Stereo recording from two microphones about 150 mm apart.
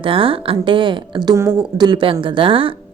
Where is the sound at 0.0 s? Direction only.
35° right (ahead or behind).